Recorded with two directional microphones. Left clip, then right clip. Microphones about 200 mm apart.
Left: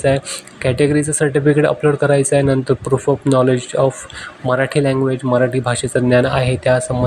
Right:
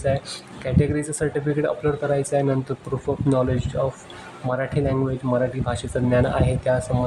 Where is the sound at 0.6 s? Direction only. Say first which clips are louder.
Left 9 dB; 20° left (ahead or behind).